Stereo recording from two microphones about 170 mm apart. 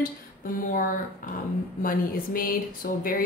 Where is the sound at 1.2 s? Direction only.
50° left (ahead or behind).